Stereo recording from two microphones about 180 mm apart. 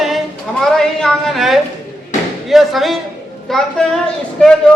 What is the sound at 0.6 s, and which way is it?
A woman's voice, 5° left (ahead or behind).